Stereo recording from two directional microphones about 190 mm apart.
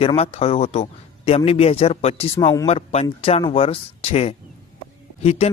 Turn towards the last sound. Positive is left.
turn(degrees=35)  # may be behind; listen again after turning